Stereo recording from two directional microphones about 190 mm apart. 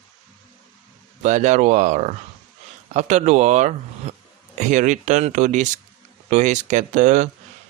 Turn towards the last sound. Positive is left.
turn(degrees=-40)  # may be behind; listen again after turning